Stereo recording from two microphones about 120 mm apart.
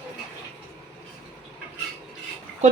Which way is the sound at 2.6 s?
70° right (ahead or behind).